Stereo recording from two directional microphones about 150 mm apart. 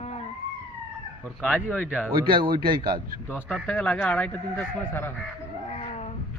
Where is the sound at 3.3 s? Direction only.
5° left (ahead or behind).